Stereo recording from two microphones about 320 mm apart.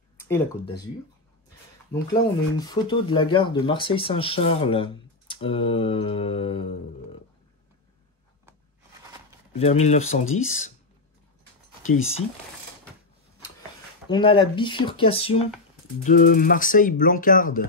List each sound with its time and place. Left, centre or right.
0.2 s speech: centre
2.5 s speech: centre
9.6 s speech: left
11.8 s speech: left
14.0 s speech: centre